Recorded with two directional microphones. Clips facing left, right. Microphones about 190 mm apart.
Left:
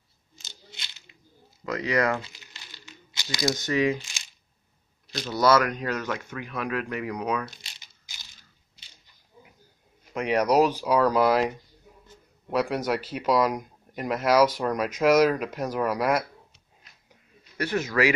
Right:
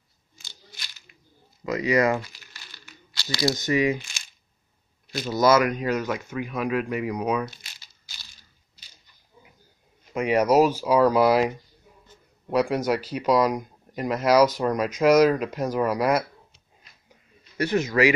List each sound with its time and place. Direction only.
0.4 s a sound: 20° left (ahead or behind)
1.6 s speech: 10° right (ahead or behind)
2.2 s crumpling: 20° left (ahead or behind)
3.5 s speech: 10° right (ahead or behind)
5.1 s speech: 10° right (ahead or behind)
7.6 s crumpling: 20° left (ahead or behind)
10.1 s speech: 5° right (ahead or behind)
17.6 s speech: 15° right (ahead or behind)